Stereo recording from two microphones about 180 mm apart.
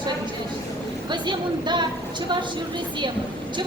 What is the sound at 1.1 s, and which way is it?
Speech, 25° right (ahead or behind).